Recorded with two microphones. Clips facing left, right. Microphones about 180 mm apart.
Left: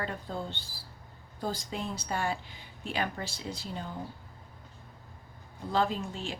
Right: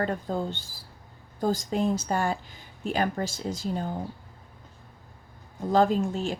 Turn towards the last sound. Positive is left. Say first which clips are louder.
# right 9 dB
turn(degrees=-45)  # may be behind; listen again after turning